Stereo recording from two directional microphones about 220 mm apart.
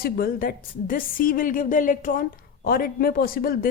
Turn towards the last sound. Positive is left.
turn(degrees=40)  # may be behind; listen again after turning